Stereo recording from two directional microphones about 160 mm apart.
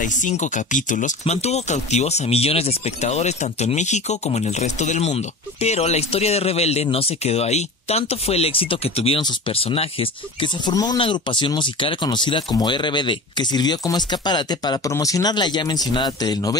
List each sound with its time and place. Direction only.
0.0 s speech: 50° left (ahead or behind); by 16.5 s 25° left (ahead or behind)